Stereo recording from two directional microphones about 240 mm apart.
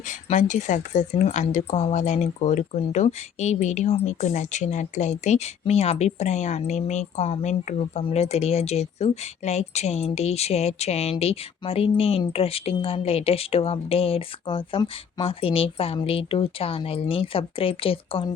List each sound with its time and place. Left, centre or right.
0.1 s speech: left